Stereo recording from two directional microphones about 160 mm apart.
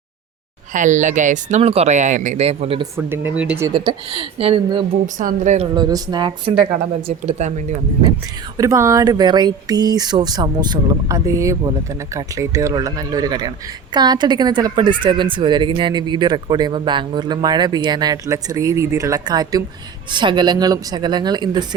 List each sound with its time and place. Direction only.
0.7 s speech: 50° right (ahead or behind)
2.9 s speech: 15° right (ahead or behind)
3.7 s a woman's voice: 30° right (ahead or behind)
5.0 s speech: 50° right (ahead or behind)
5.7 s speech: 25° right (ahead or behind)
7.3 s speech: 45° right (ahead or behind)
8.5 s speech: 20° right (ahead or behind)